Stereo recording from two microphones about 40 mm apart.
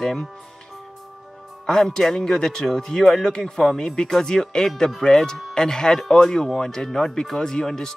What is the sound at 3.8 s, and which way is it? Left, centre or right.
Speech, centre.